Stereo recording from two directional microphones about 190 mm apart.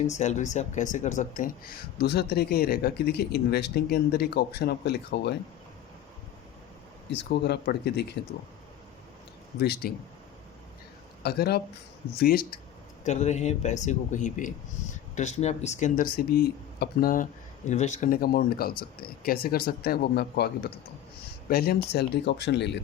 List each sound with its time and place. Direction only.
0.1 s speech: 40° left (ahead or behind); by 5.4 s 60° left (ahead or behind)
7.1 s speech: 65° left (ahead or behind)
9.6 s speech: 55° left (ahead or behind)
11.2 s speech: 55° left (ahead or behind)
13.1 s speech: 40° left (ahead or behind)
17.7 s speech: 40° left (ahead or behind); by 22.8 s 65° left (ahead or behind)